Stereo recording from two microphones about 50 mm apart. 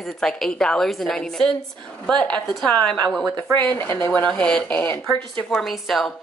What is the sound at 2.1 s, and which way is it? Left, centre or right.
Speech, left.